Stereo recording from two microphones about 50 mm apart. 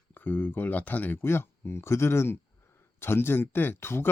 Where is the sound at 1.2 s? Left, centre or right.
Left.